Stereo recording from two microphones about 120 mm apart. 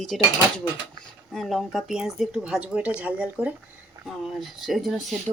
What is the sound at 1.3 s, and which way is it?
Speech, centre (ahead or behind).